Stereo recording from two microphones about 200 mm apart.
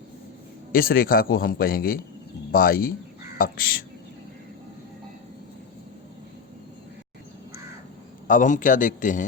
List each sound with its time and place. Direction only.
0.7 s a man's voice: 45° left (ahead or behind)
8.3 s a man's voice: 40° left (ahead or behind)